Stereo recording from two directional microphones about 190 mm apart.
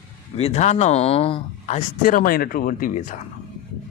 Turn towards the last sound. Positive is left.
turn(degrees=45)  # may be behind; listen again after turning